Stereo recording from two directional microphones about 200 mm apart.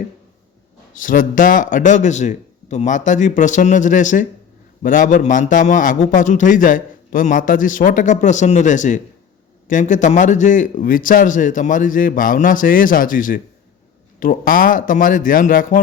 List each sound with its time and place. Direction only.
0.9 s a man's voice: 40° left (ahead or behind)